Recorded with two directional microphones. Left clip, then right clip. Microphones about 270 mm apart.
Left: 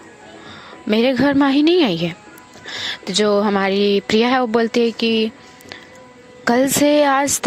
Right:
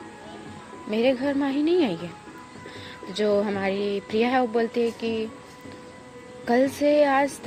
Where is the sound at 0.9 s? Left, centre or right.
Left.